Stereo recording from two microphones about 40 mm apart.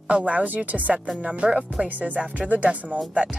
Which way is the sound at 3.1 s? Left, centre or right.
Right.